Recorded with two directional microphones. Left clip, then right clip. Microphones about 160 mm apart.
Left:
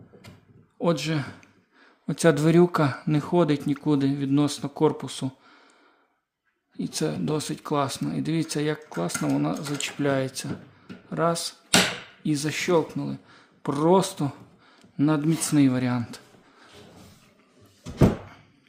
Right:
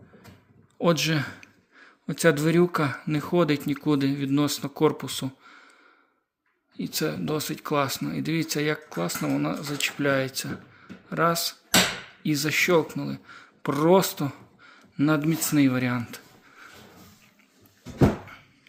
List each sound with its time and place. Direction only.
0.8 s speech: 5° left (ahead or behind)
2.0 s speech: 25° left (ahead or behind)
6.7 s speech: 20° left (ahead or behind)